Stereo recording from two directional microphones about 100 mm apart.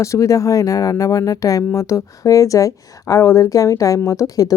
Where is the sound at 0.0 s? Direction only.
30° left (ahead or behind).